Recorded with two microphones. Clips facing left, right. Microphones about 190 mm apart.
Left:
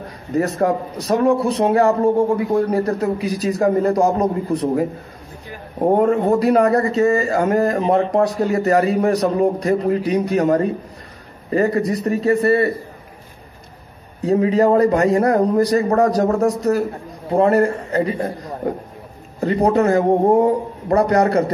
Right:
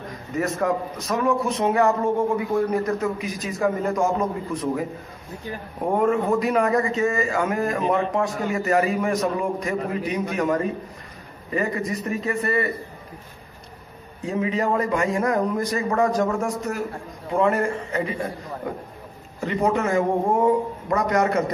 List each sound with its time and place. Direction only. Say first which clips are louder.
0.3 s a man's voice: left 5 dB; 35° left (ahead or behind)
14.2 s a man's voice: left 9 dB; 35° left (ahead or behind)